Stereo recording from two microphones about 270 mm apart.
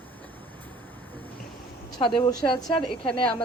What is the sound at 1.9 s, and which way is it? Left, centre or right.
A woman's voice, centre.